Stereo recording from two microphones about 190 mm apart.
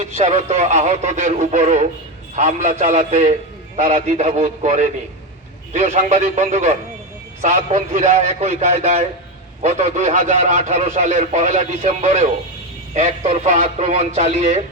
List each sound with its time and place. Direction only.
0.0 s a man's voice: 35° right (ahead or behind)